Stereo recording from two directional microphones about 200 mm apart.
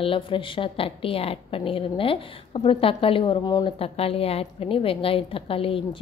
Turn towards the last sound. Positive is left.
turn(degrees=25)  # may be behind; listen again after turning